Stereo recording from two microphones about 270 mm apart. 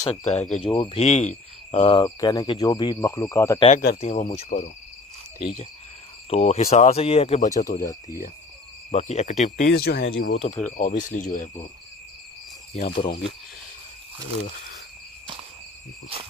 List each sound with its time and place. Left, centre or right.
0.0 s speech: left
6.3 s speech: left
8.9 s speech: left
10.4 s speech: left
12.7 s speech: left